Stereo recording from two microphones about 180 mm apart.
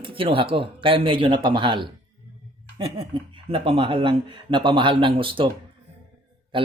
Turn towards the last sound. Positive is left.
turn(degrees=-30)  # may be behind; listen again after turning